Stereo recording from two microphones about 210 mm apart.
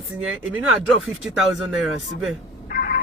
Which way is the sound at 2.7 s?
40° left (ahead or behind).